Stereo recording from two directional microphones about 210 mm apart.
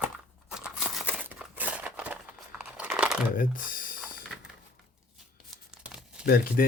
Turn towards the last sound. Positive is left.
turn(degrees=45)  # may be behind; listen again after turning